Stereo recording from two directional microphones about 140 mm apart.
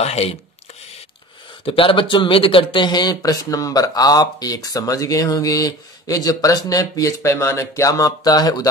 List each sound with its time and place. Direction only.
0.0 s speech: 45° left (ahead or behind)
1.7 s speech: 40° left (ahead or behind)